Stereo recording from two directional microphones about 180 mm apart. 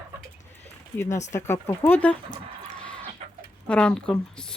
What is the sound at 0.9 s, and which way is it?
Speech, 15° left (ahead or behind).